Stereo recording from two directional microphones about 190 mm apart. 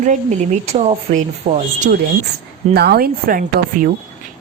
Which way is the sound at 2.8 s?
55° right (ahead or behind).